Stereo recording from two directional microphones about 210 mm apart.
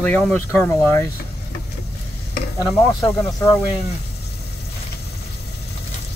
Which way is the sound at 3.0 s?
15° left (ahead or behind).